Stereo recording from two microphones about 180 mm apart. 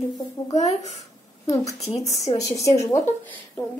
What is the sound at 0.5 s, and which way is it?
Speech, 40° left (ahead or behind).